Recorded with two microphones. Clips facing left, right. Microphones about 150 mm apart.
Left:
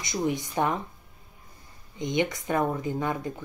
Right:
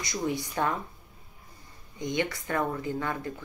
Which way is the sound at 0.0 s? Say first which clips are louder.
Left 3 dB; 20° left (ahead or behind).